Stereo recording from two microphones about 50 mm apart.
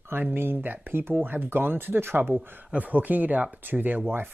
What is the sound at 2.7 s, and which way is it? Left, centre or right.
Speech, right.